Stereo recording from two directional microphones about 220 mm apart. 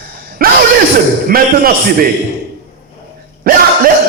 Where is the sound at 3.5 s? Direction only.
40° right (ahead or behind).